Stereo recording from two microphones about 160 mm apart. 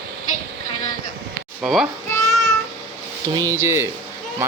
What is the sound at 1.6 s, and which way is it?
Speech, centre (ahead or behind).